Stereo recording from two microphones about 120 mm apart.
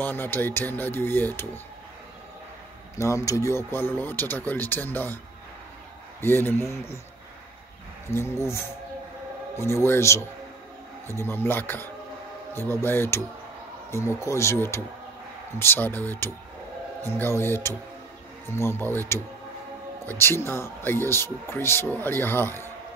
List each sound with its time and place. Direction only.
0.0 s speech: 15° left (ahead or behind)
3.0 s speech: 25° left (ahead or behind)
6.2 s speech: 20° left (ahead or behind)
8.1 s speech: 20° left (ahead or behind)
9.6 s speech: 20° left (ahead or behind)